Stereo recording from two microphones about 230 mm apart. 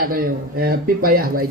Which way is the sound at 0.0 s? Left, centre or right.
Right.